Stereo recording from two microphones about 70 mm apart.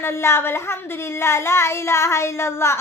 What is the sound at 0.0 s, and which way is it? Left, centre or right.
Speech, left.